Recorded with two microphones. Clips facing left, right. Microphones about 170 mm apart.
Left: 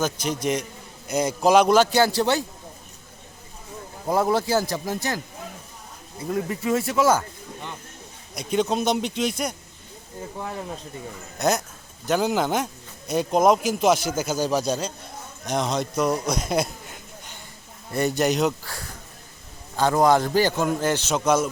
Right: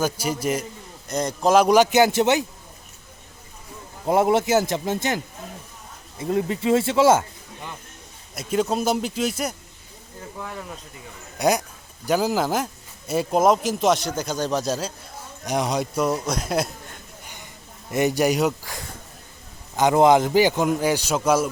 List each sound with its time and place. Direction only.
0.0 s a man's voice: 10° right (ahead or behind)
1.0 s speech: 5° left (ahead or behind)
1.6 s a man's voice: 15° right (ahead or behind)
4.0 s a man's voice: 25° right (ahead or behind)
6.3 s a man's voice: 25° right (ahead or behind)
8.4 s speech: 5° right (ahead or behind)
10.3 s speech: 30° left (ahead or behind)
11.3 s a man's voice: 10° right (ahead or behind)
17.9 s a man's voice: 15° right (ahead or behind)